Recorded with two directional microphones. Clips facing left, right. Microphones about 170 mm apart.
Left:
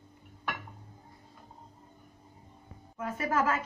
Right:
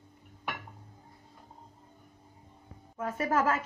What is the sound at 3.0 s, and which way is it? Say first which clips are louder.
Speech: right 1 dB; 40° right (ahead or behind).